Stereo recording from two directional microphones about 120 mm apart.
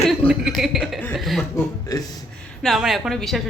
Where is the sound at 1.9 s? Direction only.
30° left (ahead or behind).